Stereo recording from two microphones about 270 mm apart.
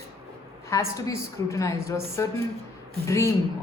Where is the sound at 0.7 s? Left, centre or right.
Centre.